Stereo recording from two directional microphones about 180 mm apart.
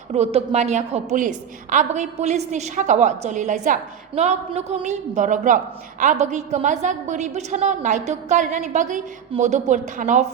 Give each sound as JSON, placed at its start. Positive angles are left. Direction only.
{"t": 0.1, "sound": "a woman's voice", "side_deg": -35}